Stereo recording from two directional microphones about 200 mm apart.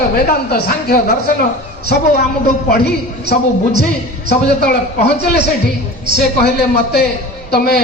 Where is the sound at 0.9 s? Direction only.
50° left (ahead or behind).